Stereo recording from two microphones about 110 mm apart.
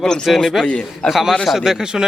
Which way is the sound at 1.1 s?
Centre (ahead or behind).